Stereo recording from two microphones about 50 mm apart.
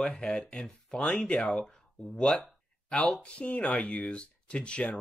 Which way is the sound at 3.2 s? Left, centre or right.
Left.